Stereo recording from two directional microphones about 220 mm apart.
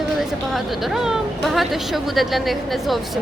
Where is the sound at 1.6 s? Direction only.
Centre (ahead or behind).